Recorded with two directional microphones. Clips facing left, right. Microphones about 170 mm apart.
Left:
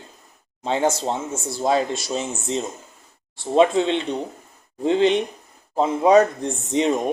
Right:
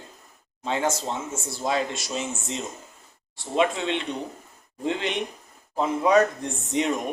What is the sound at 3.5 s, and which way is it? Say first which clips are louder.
Speech: left 7 dB; 35° left (ahead or behind).